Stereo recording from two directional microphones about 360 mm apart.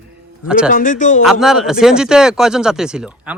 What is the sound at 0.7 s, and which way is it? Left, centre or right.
Speech, left.